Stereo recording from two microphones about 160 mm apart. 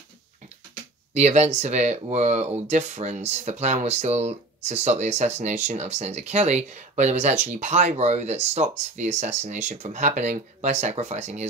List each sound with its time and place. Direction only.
1.1 s speech: 45° right (ahead or behind)